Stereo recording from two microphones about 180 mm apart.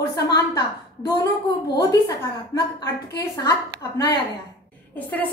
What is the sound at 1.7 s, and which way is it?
Speech, 20° left (ahead or behind).